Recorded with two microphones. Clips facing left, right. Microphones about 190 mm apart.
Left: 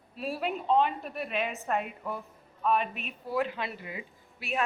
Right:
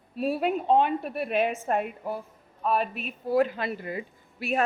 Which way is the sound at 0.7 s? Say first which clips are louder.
Right 2 dB; 55° right (ahead or behind).